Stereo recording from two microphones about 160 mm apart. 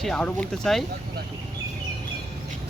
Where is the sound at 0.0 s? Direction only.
5° left (ahead or behind).